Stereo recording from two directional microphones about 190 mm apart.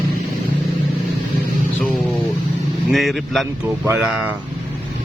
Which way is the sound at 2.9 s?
Centre (ahead or behind).